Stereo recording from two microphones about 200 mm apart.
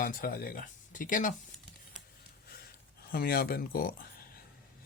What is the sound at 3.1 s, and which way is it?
Speech, 50° left (ahead or behind).